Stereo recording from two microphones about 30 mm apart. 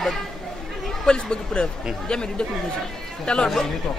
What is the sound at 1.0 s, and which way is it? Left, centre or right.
Speech, left.